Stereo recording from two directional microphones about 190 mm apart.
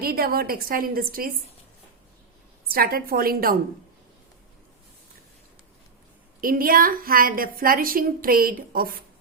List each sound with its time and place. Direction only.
0.0 s a woman's voice: 55° right (ahead or behind)
2.6 s a woman's voice: 50° right (ahead or behind)
6.4 s a woman's voice: 50° right (ahead or behind)